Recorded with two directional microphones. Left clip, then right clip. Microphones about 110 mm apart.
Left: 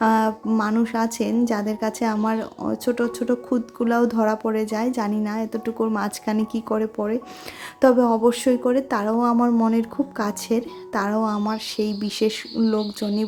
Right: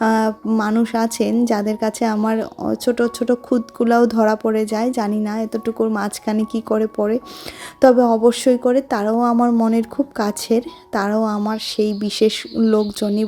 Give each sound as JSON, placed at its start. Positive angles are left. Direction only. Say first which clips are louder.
{"t": 0.0, "sound": "a sound", "louder": "right 2 dB", "side_deg": -40}
{"t": 0.6, "sound": "speech", "louder": "right 4 dB", "side_deg": -45}
{"t": 9.3, "sound": "speech", "louder": "right 3 dB", "side_deg": -25}
{"t": 9.7, "sound": "speech", "louder": "right 4 dB", "side_deg": -45}